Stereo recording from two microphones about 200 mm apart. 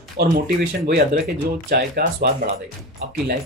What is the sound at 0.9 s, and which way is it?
Speech, 55° right (ahead or behind).